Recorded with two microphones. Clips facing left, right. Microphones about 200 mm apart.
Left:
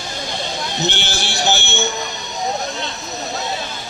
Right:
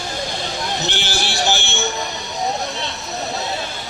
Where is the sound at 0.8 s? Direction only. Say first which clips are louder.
Left 1 dB; 20° left (ahead or behind).